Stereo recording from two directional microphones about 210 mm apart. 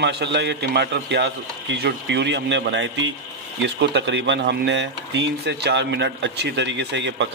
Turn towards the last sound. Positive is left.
turn(degrees=-60)  # may be behind; listen again after turning